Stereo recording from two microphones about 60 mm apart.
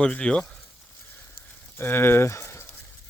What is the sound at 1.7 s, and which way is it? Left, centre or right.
Speech, left.